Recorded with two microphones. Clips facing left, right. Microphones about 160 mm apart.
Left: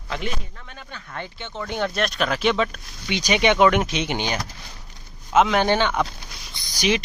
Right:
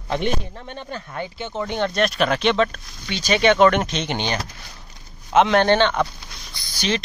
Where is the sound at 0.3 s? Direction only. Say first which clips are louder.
Right 7 dB; 30° right (ahead or behind).